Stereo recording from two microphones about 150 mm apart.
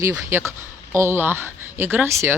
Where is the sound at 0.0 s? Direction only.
20° right (ahead or behind).